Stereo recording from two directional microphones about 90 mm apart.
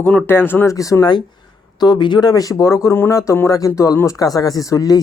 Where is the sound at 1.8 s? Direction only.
55° left (ahead or behind).